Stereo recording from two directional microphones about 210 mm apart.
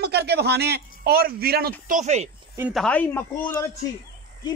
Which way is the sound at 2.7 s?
5° left (ahead or behind).